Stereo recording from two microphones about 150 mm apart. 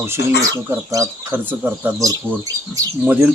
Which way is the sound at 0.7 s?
15° right (ahead or behind).